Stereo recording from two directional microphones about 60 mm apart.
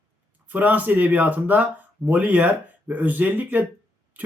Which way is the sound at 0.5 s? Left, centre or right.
Right.